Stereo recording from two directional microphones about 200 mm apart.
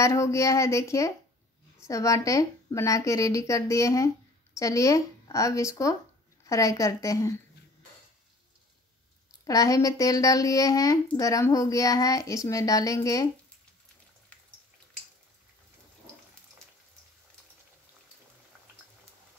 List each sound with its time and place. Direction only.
0.0 s speech: 15° left (ahead or behind)
9.4 s speech: 15° left (ahead or behind)